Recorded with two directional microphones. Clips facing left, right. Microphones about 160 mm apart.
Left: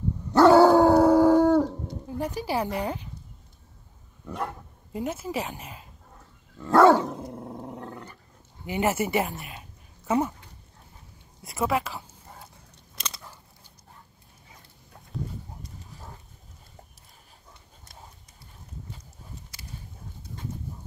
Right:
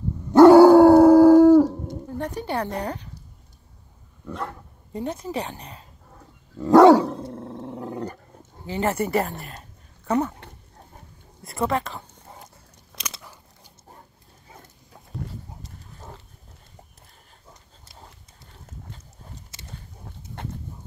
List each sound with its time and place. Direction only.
0.4 s dog: 15° right (ahead or behind)
2.0 s speech: 10° left (ahead or behind)
4.3 s speech: 10° left (ahead or behind)
6.8 s dog: 15° right (ahead or behind)
7.3 s roar: 10° left (ahead or behind)
8.0 s dog: 45° right (ahead or behind)
8.6 s speech: 10° left (ahead or behind)
9.4 s a sound: 5° left (ahead or behind)
11.4 s speech: 5° left (ahead or behind)
19.5 s a sound: 25° right (ahead or behind)